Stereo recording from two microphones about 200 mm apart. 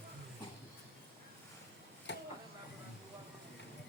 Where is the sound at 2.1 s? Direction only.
60° left (ahead or behind).